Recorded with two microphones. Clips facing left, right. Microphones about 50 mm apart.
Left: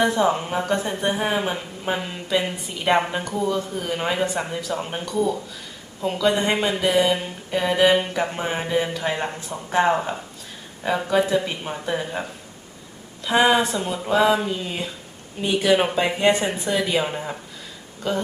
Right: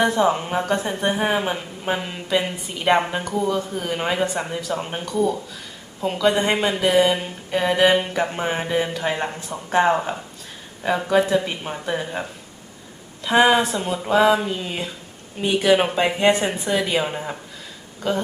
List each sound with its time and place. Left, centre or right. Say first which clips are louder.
0.0 s speech: right 1 dB; centre